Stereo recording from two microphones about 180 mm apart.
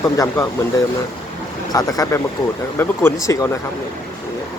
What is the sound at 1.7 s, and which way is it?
Speech, 20° left (ahead or behind).